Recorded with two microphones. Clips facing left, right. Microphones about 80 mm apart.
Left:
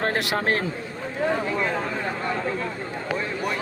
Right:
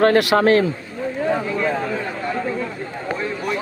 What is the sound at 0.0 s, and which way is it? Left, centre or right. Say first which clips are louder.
Speech: right 10 dB; right.